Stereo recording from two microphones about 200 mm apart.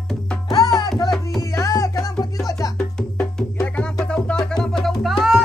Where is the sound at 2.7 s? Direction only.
5° left (ahead or behind).